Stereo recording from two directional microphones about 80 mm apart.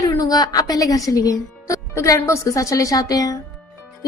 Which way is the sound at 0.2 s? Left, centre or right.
Left.